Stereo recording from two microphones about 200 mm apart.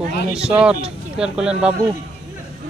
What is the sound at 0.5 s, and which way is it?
Speech, 5° right (ahead or behind).